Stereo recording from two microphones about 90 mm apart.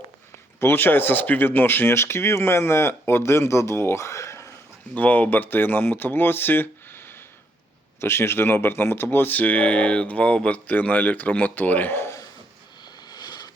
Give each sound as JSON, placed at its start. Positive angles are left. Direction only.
{"t": 0.6, "sound": "speech", "side_deg": 25}
{"t": 4.9, "sound": "speech", "side_deg": 20}
{"t": 12.8, "sound": "sniff", "side_deg": 50}